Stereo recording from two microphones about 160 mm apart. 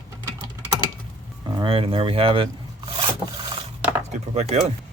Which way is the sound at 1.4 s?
25° right (ahead or behind).